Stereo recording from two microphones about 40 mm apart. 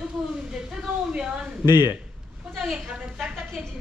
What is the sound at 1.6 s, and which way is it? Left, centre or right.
Speech, right.